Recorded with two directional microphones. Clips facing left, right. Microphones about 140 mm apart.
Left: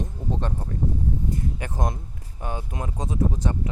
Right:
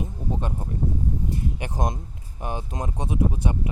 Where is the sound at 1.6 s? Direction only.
20° right (ahead or behind).